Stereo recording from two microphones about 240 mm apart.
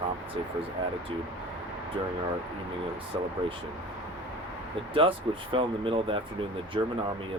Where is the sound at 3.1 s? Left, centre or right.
Centre.